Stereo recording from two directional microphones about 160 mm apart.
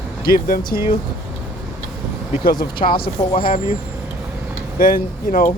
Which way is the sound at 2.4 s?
65° left (ahead or behind).